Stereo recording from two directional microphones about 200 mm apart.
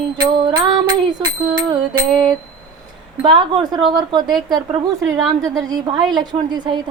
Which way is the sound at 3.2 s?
25° right (ahead or behind).